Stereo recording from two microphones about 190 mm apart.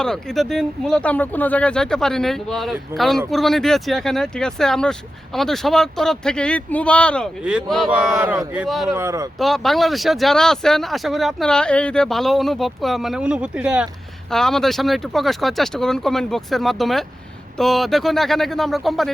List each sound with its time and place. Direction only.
0.0 s speech: 5° left (ahead or behind)
9.0 s speech: 15° right (ahead or behind)
9.4 s speech: centre (ahead or behind)